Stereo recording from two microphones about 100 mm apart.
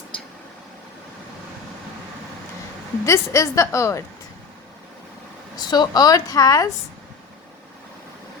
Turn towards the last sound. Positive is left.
turn(degrees=35)  # may be behind; listen again after turning